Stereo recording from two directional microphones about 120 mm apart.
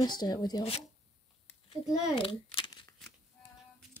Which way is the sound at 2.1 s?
45° left (ahead or behind).